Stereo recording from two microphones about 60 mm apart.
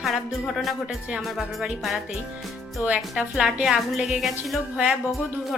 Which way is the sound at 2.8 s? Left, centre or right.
Right.